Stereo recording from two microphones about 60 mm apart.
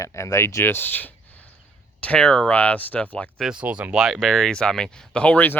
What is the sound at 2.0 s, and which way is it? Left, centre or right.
Speech, centre.